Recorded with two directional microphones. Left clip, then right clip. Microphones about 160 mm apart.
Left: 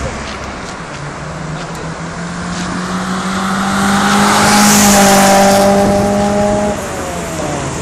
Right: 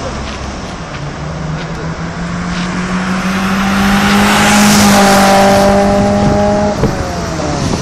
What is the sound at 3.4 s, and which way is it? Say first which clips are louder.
Vehicle: even; 20° right (ahead or behind).